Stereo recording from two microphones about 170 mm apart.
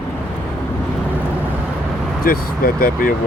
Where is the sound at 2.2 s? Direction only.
60° left (ahead or behind).